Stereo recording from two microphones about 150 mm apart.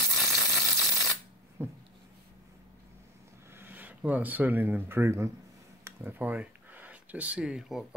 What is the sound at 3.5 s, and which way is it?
Speech, 15° right (ahead or behind).